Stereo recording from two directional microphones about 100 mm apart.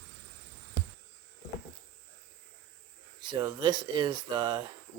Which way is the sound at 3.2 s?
45° right (ahead or behind).